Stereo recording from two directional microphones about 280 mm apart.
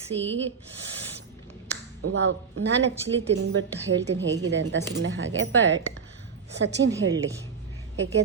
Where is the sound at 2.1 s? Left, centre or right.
Right.